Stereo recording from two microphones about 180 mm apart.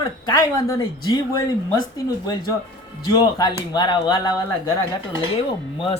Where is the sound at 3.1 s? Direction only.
20° left (ahead or behind).